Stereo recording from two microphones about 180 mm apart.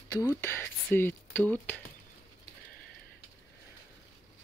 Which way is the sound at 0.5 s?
15° left (ahead or behind).